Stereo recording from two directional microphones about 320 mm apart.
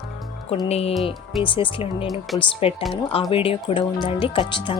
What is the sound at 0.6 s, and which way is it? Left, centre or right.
Speech, centre.